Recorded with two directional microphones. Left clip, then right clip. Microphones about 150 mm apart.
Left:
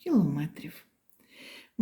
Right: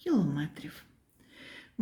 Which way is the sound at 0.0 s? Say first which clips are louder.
Left 2 dB; 10° left (ahead or behind).